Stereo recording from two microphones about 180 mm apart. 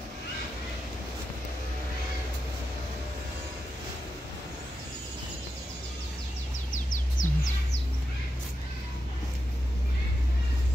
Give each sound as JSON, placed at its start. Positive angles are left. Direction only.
{"t": 6.7, "sound": "bird", "side_deg": 45}